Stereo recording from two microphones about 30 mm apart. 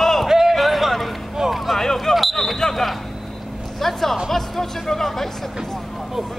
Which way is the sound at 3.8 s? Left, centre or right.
Centre.